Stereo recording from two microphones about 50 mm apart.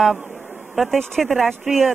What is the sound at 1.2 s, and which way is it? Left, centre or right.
Speech, centre.